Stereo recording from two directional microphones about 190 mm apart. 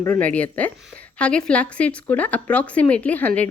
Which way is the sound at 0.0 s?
10° left (ahead or behind).